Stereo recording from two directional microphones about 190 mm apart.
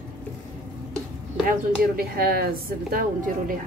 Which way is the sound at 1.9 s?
50° right (ahead or behind).